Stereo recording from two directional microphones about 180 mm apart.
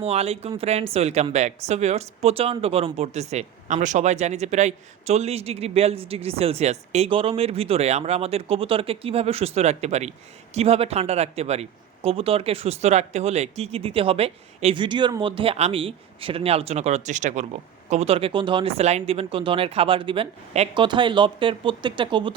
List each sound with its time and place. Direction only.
0.0 s speech: 35° right (ahead or behind)